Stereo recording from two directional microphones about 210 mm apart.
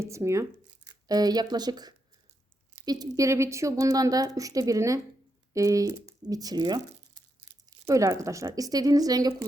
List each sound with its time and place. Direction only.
0.0 s a woman's voice: 15° right (ahead or behind)